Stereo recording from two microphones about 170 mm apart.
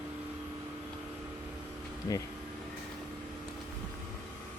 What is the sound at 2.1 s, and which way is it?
Speech, 20° left (ahead or behind).